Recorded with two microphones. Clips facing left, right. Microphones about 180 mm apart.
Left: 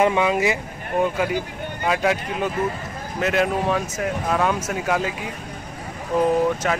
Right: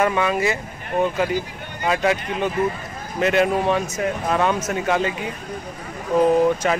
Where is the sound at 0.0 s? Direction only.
15° left (ahead or behind).